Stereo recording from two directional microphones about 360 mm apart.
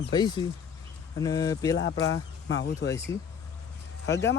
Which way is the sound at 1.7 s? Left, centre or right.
Left.